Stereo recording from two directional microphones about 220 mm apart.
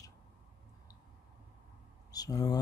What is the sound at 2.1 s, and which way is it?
Speech, 15° left (ahead or behind).